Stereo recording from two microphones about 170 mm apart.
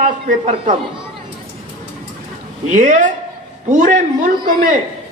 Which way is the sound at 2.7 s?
50° right (ahead or behind).